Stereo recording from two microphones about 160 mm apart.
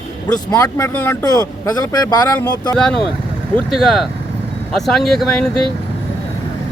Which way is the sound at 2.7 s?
5° left (ahead or behind).